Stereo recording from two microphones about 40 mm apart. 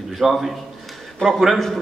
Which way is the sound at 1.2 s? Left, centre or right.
Left.